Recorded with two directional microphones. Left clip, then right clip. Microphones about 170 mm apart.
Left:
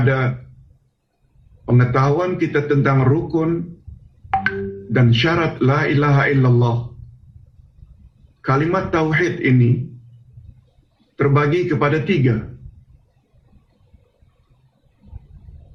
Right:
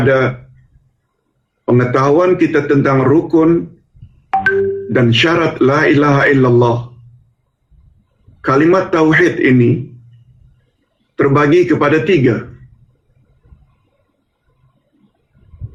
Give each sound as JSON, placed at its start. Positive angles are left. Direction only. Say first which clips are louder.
{"t": 0.0, "sound": "speech", "louder": "right 8 dB", "side_deg": -55}
{"t": 1.6, "sound": "speech", "louder": "right 6 dB", "side_deg": -55}
{"t": 8.4, "sound": "speech", "louder": "right 8 dB", "side_deg": -60}
{"t": 11.2, "sound": "speech", "louder": "right 7 dB", "side_deg": -60}